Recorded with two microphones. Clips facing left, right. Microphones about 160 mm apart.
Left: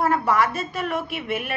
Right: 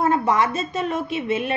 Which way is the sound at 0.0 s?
20° right (ahead or behind).